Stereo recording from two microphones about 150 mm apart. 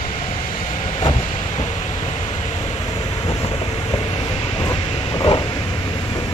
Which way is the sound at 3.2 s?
30° left (ahead or behind).